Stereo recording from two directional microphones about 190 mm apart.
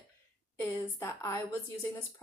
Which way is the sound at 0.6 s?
15° left (ahead or behind).